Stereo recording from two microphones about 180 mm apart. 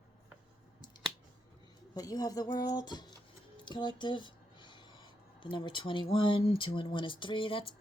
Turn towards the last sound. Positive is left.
turn(degrees=30)  # may be behind; listen again after turning